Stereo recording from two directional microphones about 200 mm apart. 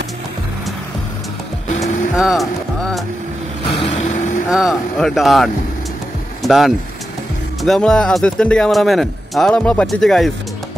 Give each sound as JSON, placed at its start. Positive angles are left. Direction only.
{"t": 1.8, "sound": "vehicle", "side_deg": 0}
{"t": 3.7, "sound": "vehicle", "side_deg": 30}
{"t": 4.5, "sound": "speech", "side_deg": 0}